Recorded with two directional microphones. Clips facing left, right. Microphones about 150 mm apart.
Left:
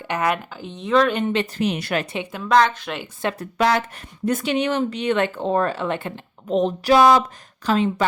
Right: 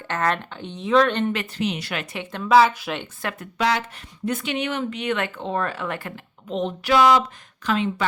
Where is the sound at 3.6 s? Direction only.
50° left (ahead or behind); by 6.1 s 25° left (ahead or behind).